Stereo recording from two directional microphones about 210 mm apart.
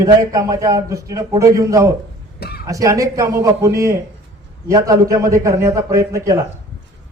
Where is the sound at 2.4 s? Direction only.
50° left (ahead or behind).